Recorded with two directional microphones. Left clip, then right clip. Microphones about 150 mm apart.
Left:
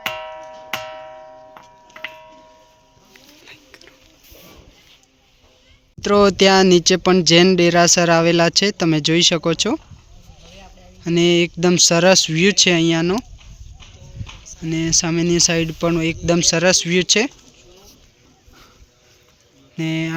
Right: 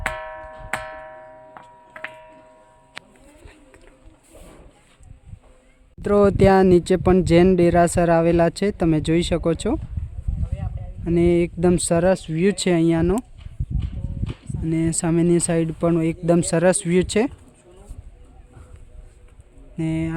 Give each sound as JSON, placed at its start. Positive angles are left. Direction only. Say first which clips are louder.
{"t": 0.2, "sound": "clock", "louder": "left 2 dB", "side_deg": 0}
{"t": 0.7, "sound": "music", "louder": "left 1 dB", "side_deg": 0}
{"t": 3.1, "sound": "a sound", "louder": "left 6 dB", "side_deg": -5}
{"t": 6.0, "sound": "speech", "louder": "left 3 dB", "side_deg": 0}
{"t": 11.0, "sound": "speech", "louder": "left 3 dB", "side_deg": -5}
{"t": 12.0, "sound": "speech", "louder": "left 6 dB", "side_deg": 15}
{"t": 12.5, "sound": "speech", "louder": "left 1 dB", "side_deg": -5}
{"t": 13.4, "sound": "horse", "louder": "right 5 dB", "side_deg": -90}
{"t": 14.6, "sound": "speech", "louder": "left 4 dB", "side_deg": -5}
{"t": 19.7, "sound": "speech", "louder": "left 3 dB", "side_deg": -10}